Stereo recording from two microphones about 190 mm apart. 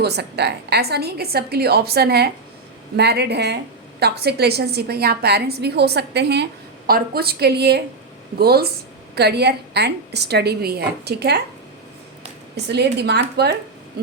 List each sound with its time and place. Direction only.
0.0 s a woman's voice: 60° right (ahead or behind)
12.6 s a woman's voice: 60° right (ahead or behind)